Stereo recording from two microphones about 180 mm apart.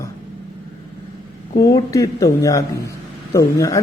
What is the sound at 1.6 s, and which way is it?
A man's voice, 20° left (ahead or behind).